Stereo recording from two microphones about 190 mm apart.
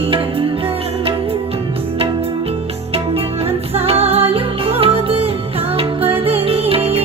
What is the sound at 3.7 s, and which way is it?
Music, 30° right (ahead or behind).